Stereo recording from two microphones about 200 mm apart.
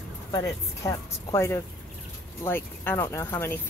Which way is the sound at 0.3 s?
15° left (ahead or behind).